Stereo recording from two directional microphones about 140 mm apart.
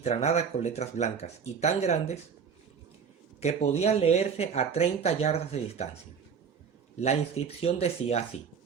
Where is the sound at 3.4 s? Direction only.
50° left (ahead or behind).